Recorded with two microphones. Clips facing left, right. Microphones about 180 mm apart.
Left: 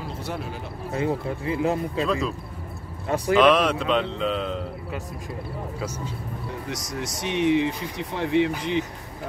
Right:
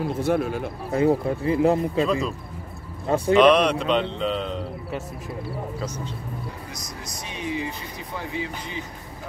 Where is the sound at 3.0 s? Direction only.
30° right (ahead or behind).